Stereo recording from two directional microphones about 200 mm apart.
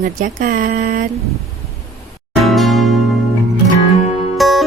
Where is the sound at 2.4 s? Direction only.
Centre (ahead or behind).